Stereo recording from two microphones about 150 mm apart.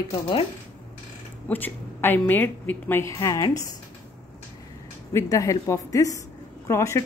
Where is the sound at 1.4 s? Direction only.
10° left (ahead or behind).